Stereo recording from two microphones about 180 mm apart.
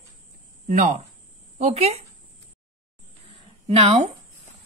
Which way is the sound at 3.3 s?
35° right (ahead or behind).